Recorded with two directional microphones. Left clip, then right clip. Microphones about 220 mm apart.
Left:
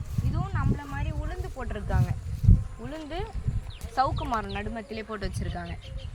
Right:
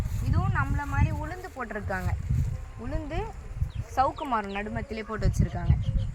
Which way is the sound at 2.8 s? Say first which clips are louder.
Right 2 dB; 15° left (ahead or behind).